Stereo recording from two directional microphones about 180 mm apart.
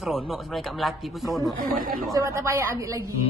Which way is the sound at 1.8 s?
50° right (ahead or behind).